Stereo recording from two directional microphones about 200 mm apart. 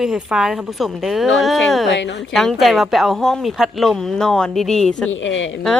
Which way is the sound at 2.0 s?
65° left (ahead or behind).